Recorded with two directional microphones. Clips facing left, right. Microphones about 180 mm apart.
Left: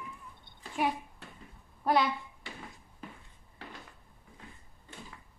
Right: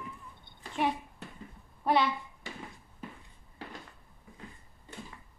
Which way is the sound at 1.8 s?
Centre (ahead or behind).